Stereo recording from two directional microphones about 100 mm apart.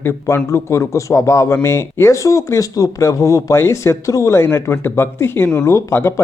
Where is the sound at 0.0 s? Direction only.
25° left (ahead or behind).